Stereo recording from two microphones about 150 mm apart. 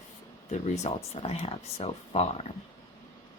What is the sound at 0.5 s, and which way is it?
Speech, 50° left (ahead or behind).